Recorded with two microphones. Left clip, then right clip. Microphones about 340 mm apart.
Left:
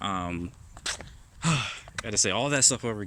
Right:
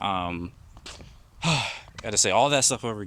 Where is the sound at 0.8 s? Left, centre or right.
Left.